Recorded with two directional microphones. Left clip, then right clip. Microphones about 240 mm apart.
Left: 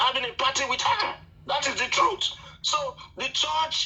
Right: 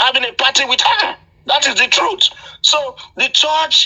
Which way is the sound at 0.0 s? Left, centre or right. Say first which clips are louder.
Right 10 dB; right.